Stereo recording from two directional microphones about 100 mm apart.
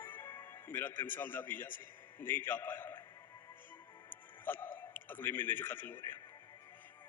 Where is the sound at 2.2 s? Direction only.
20° left (ahead or behind).